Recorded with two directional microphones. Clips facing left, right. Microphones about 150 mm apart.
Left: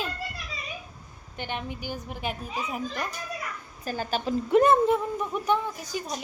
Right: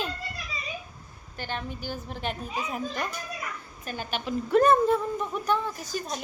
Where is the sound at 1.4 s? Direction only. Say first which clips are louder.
Left 1 dB; 15° left (ahead or behind).